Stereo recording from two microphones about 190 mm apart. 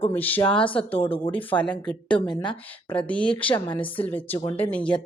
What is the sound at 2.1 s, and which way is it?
Speech, 25° left (ahead or behind).